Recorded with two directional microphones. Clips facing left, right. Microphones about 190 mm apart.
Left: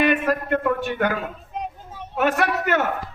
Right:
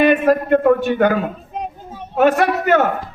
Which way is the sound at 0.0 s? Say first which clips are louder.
Right 7 dB; 30° right (ahead or behind).